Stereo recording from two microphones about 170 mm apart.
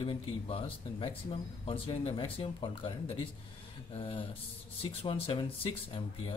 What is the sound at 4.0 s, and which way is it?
Speech, 30° left (ahead or behind).